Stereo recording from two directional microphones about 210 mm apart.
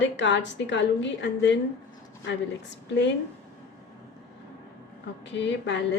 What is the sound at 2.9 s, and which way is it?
Speech, 60° left (ahead or behind).